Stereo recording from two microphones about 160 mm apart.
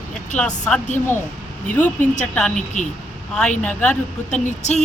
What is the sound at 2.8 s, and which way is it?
Speech, 50° left (ahead or behind).